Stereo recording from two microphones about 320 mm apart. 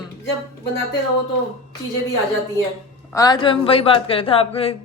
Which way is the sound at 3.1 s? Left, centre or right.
Centre.